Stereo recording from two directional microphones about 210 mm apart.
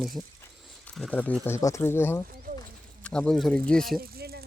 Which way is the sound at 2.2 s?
40° right (ahead or behind).